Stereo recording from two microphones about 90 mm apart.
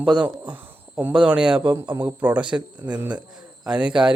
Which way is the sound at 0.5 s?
20° right (ahead or behind).